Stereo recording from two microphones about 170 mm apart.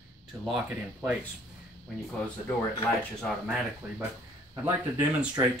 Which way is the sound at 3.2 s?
Centre (ahead or behind).